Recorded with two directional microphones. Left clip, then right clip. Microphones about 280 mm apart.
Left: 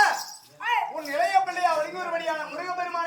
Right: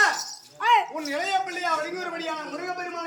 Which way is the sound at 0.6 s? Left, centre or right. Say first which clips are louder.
Right 6 dB; centre.